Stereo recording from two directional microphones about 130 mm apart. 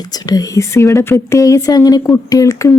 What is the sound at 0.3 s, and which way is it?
Speech, 25° left (ahead or behind).